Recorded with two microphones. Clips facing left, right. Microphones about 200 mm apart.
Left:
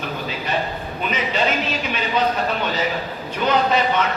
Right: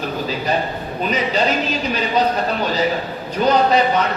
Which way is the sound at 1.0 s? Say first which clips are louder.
Right 3 dB; 35° right (ahead or behind).